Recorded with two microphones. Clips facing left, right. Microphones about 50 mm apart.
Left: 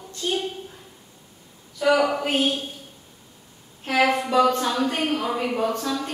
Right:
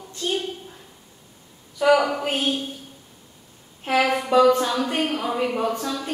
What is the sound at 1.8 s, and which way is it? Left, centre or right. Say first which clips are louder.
Speech: right 2 dB; centre.